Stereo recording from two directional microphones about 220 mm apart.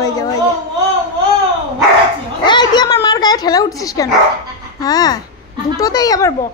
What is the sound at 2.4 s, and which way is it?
A child's voice, 20° left (ahead or behind).